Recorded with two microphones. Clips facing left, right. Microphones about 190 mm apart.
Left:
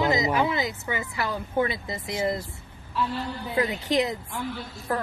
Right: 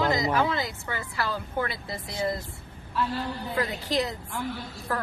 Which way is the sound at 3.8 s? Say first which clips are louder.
Left 3 dB; 20° left (ahead or behind).